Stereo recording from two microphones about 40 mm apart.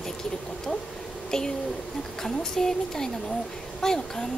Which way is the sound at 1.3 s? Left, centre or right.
Centre.